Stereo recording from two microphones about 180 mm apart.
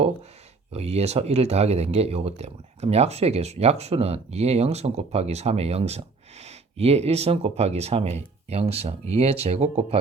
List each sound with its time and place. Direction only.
0.7 s speech: 35° right (ahead or behind)